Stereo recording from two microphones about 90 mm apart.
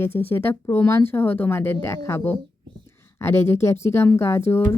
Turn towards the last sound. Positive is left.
turn(degrees=25)  # may be behind; listen again after turning